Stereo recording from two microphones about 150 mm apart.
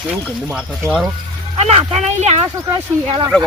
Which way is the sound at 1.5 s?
45° right (ahead or behind).